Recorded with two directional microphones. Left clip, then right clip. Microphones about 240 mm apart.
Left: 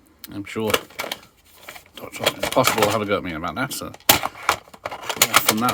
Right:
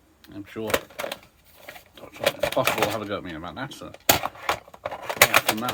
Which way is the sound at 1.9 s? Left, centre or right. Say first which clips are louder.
Left 8 dB; left.